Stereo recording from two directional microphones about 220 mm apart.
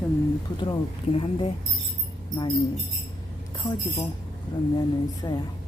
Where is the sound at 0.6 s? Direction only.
25° left (ahead or behind).